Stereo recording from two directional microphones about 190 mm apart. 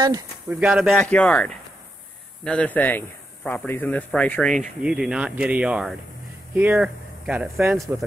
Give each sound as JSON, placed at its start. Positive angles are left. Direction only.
{"t": 0.0, "sound": "speech", "side_deg": -20}
{"t": 0.6, "sound": "a man's voice", "side_deg": -5}